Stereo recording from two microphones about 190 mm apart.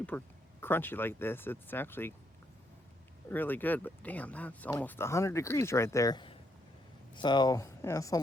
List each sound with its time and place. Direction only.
0.1 s speech: 10° left (ahead or behind)
3.2 s speech: 10° left (ahead or behind)